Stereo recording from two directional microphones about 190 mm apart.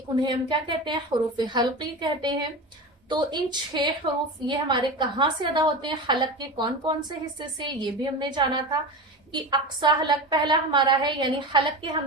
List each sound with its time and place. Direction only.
0.3 s a woman's voice: 25° right (ahead or behind)